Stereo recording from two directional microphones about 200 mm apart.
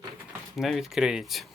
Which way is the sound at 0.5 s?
Centre (ahead or behind).